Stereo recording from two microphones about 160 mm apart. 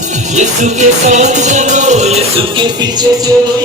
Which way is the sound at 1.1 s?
45° right (ahead or behind).